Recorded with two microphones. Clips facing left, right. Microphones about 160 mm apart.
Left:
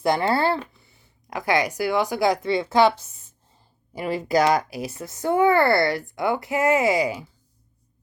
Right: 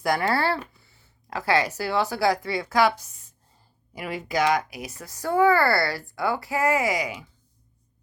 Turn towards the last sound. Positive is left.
turn(degrees=30)  # may be behind; listen again after turning